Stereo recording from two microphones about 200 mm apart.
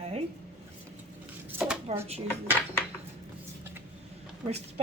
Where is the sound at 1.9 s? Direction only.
30° right (ahead or behind).